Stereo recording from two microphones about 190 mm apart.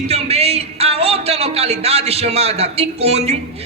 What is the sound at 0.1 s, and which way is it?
A man's voice, 30° right (ahead or behind).